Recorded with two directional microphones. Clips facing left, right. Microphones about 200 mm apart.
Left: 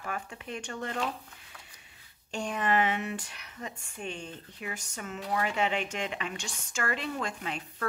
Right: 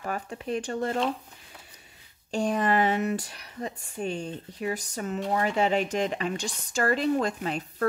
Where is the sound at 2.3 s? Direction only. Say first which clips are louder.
Right 5 dB; 35° right (ahead or behind).